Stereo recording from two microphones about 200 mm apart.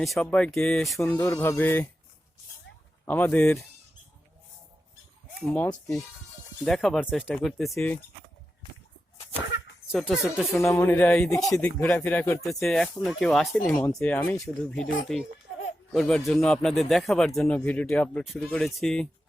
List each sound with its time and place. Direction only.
0.0 s speech: centre (ahead or behind)
3.1 s speech: 10° left (ahead or behind)
5.4 s speech: 5° left (ahead or behind)
9.9 s speech: centre (ahead or behind)
10.7 s speech: 10° left (ahead or behind)